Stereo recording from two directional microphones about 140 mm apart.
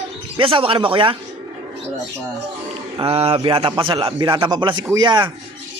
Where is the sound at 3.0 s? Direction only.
45° right (ahead or behind).